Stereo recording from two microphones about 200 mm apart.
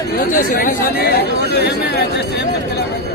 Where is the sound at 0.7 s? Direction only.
50° left (ahead or behind).